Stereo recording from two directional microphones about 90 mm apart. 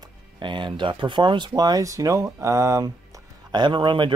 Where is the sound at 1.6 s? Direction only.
40° right (ahead or behind).